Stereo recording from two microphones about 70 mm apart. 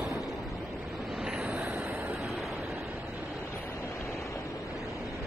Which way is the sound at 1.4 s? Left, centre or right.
Right.